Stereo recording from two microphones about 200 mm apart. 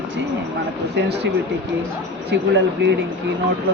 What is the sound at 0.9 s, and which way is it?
Speech, 60° right (ahead or behind).